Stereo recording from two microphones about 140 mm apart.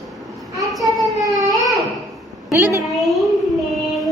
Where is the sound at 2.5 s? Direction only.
15° right (ahead or behind).